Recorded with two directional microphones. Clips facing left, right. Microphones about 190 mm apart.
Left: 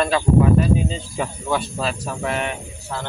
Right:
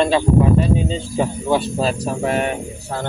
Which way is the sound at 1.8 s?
35° right (ahead or behind).